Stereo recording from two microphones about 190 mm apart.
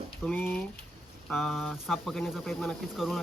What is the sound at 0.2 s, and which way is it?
Speech, 10° left (ahead or behind).